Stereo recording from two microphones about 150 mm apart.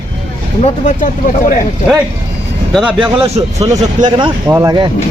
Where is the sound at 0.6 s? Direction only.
55° left (ahead or behind).